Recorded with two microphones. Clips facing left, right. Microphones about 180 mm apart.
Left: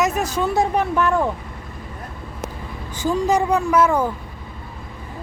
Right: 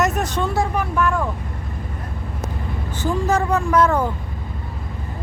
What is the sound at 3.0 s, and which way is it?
A woman's voice, 15° left (ahead or behind).